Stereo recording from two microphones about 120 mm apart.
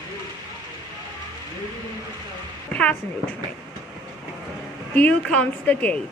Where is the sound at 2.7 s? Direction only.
10° left (ahead or behind).